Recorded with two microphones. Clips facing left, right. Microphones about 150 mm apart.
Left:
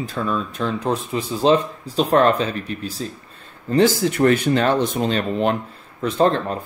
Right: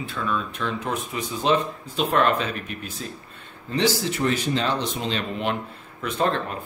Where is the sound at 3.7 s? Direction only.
50° left (ahead or behind).